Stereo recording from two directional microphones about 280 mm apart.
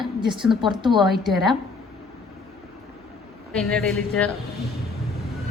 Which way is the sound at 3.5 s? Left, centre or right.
Centre.